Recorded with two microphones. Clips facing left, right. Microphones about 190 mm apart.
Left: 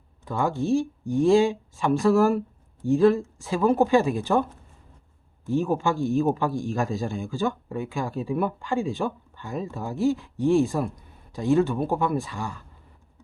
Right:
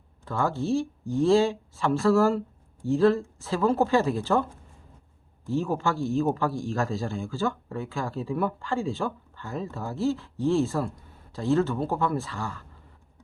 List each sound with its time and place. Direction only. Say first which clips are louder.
0.3 s speech: left 2 dB; 15° left (ahead or behind)
5.5 s speech: left 3 dB; 15° left (ahead or behind)